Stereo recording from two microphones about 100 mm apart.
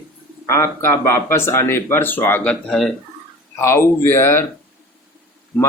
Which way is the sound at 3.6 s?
25° left (ahead or behind).